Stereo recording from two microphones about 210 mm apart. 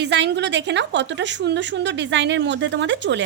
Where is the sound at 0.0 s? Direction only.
55° right (ahead or behind).